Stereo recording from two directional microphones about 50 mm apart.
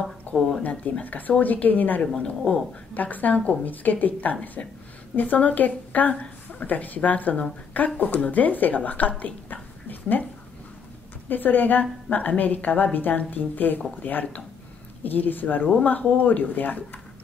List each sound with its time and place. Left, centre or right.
0.3 s a sound: left
1.0 s speech: left
11.2 s speech: left
15.6 s speech: left